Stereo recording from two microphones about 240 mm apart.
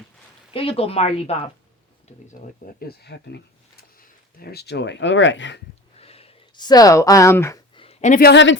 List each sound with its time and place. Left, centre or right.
0.5 s speech: left
2.7 s speech: left
6.0 s a sound: left
7.9 s speech: left